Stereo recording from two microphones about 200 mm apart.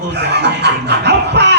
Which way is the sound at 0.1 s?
55° right (ahead or behind).